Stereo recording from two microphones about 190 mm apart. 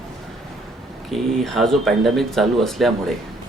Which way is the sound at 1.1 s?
Centre (ahead or behind).